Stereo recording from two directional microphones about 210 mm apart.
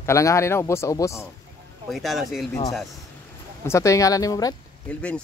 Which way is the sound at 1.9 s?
Centre (ahead or behind).